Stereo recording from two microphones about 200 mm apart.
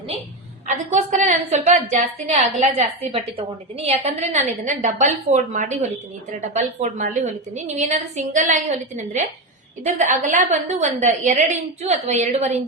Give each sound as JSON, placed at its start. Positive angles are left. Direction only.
{"t": 0.7, "sound": "a woman's voice", "side_deg": -35}
{"t": 10.0, "sound": "a woman's voice", "side_deg": -40}